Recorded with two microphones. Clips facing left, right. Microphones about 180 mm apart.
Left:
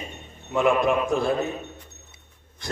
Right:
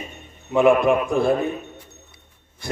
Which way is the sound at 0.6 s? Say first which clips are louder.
Right 5 dB; 55° right (ahead or behind).